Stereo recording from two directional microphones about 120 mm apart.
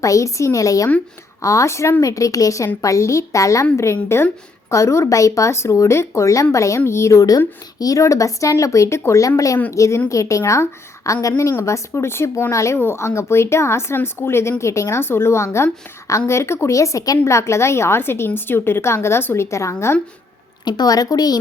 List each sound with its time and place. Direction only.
0.0 s a woman's voice: 25° left (ahead or behind)